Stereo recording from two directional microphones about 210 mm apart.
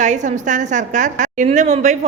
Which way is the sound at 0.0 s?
35° right (ahead or behind).